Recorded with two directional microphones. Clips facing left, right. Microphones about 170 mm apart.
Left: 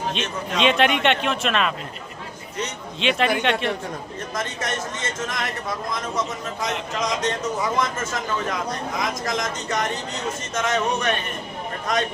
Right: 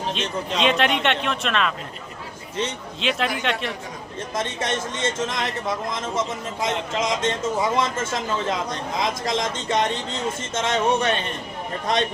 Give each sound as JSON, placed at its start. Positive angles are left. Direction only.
{"t": 0.6, "sound": "a man's voice", "side_deg": 0}
{"t": 3.0, "sound": "a man's voice", "side_deg": 0}
{"t": 4.4, "sound": "speech", "side_deg": -25}